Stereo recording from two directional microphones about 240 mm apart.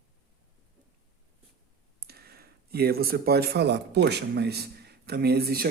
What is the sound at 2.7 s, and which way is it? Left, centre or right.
Speech, right.